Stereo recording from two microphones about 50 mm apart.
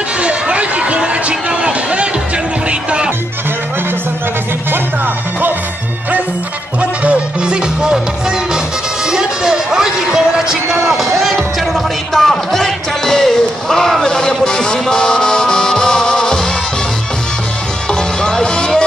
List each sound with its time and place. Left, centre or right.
0.2 s a sound: right
2.7 s music: right
4.6 s music: right
6.8 s music: right
9.0 s a sound: centre
18.2 s music: centre